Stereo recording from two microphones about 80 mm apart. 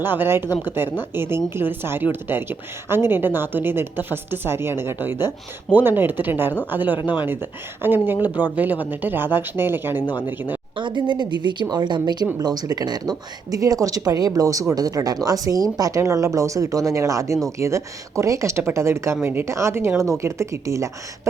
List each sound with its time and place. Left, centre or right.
0.0 s a woman's voice: right
10.8 s speech: right
12.4 s speech: right
16.0 s speech: right